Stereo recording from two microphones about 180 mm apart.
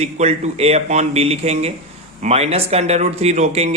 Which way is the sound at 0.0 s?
35° right (ahead or behind).